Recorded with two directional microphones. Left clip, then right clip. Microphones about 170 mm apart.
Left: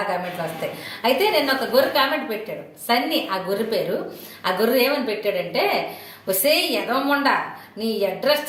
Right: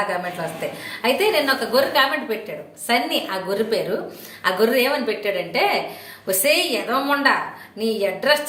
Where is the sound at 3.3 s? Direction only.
10° right (ahead or behind).